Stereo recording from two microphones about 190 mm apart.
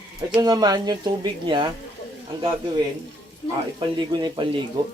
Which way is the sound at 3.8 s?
25° right (ahead or behind).